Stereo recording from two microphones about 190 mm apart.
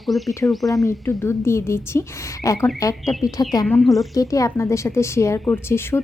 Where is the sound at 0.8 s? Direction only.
15° left (ahead or behind).